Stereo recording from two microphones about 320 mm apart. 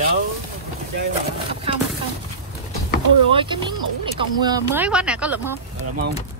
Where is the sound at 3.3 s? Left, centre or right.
Centre.